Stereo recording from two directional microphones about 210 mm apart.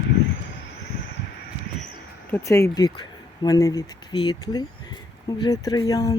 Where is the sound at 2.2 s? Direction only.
10° left (ahead or behind).